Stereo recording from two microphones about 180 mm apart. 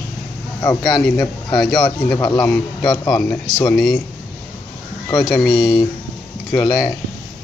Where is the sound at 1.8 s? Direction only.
15° left (ahead or behind).